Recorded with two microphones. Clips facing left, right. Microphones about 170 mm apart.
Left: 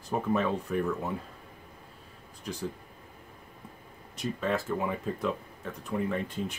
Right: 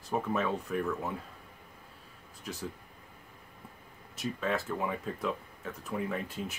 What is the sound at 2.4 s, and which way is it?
Speech, 5° right (ahead or behind).